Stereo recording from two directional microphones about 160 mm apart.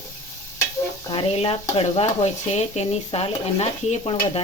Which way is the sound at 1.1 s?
35° left (ahead or behind).